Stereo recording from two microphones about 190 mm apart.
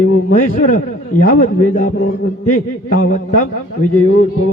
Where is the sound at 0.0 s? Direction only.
45° left (ahead or behind).